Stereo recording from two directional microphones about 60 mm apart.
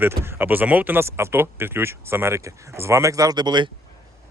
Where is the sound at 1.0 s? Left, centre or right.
Right.